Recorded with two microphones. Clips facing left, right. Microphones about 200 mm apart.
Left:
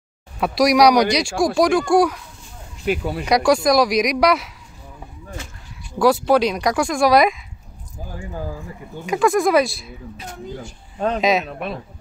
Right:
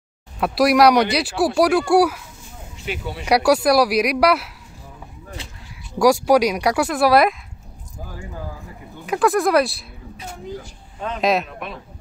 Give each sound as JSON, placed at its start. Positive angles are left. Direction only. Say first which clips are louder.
{"t": 0.4, "sound": "speech", "louder": "even", "side_deg": 0}
{"t": 2.8, "sound": "speech", "louder": "left 7 dB", "side_deg": 60}
{"t": 3.3, "sound": "speech", "louder": "even", "side_deg": -10}
{"t": 5.9, "sound": "speech", "louder": "right 1 dB", "side_deg": -10}
{"t": 9.0, "sound": "speech", "louder": "left 1 dB", "side_deg": 0}
{"t": 11.1, "sound": "speech", "louder": "even", "side_deg": 0}
{"t": 11.4, "sound": "a woman's voice", "louder": "left 5 dB", "side_deg": 35}